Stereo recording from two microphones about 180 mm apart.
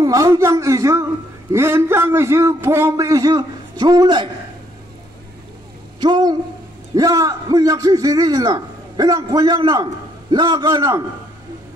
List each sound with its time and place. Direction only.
0.0 s a man's voice: 20° right (ahead or behind)
5.9 s a man's voice: 25° right (ahead or behind)